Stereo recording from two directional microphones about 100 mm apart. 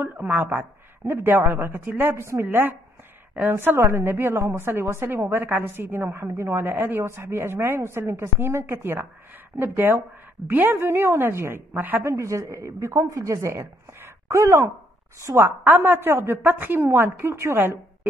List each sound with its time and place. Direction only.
0.0 s a woman's voice: 15° right (ahead or behind)
12.1 s a woman's voice: 30° right (ahead or behind)